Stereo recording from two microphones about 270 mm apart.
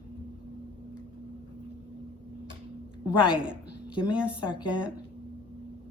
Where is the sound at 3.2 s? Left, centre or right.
Centre.